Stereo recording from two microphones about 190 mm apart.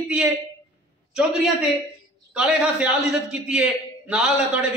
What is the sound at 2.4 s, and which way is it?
A man's voice, 5° right (ahead or behind).